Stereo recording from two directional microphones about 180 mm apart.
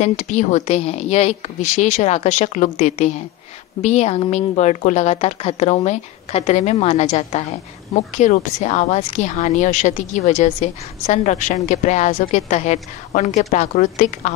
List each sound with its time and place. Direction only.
0.0 s a woman's voice: 40° left (ahead or behind)